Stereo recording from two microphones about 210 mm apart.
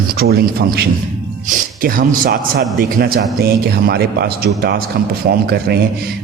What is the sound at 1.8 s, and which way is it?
A man's voice, 45° right (ahead or behind).